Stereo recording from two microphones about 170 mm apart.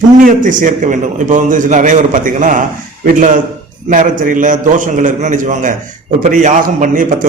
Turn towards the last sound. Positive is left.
turn(degrees=-50)  # may be behind; listen again after turning